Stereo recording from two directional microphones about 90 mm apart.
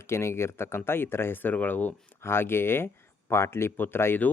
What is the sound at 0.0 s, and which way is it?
Speech, 30° left (ahead or behind).